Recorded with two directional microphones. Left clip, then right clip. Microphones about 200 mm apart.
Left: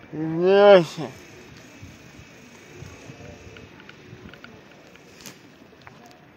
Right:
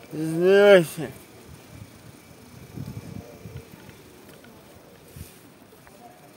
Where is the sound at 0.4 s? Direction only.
20° right (ahead or behind).